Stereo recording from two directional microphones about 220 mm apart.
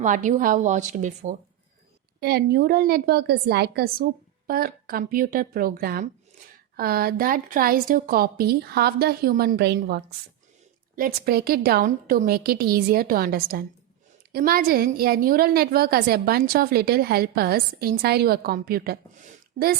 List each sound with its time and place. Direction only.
0.0 s a woman's voice: 35° right (ahead or behind)
2.2 s a woman's voice: 45° right (ahead or behind)